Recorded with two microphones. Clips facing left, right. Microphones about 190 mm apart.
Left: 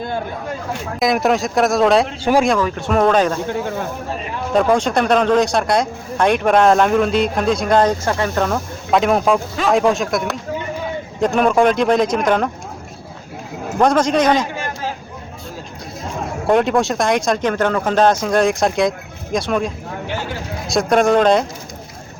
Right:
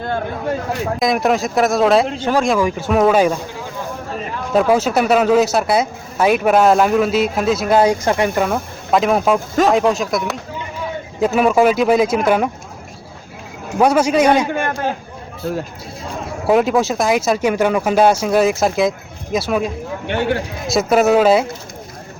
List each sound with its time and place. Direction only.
0.9 s speech: centre (ahead or behind)
2.1 s speech: 10° left (ahead or behind)
2.5 s speech: 10° right (ahead or behind)
4.5 s speech: 5° right (ahead or behind)
8.4 s speech: 5° right (ahead or behind)
13.7 s speech: 10° right (ahead or behind)
14.5 s chatter: 55° right (ahead or behind)
16.5 s speech: 5° right (ahead or behind)
20.1 s speech: 65° right (ahead or behind)
20.7 s speech: 5° right (ahead or behind)